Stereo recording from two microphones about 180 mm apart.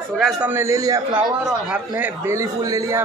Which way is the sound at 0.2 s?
10° right (ahead or behind).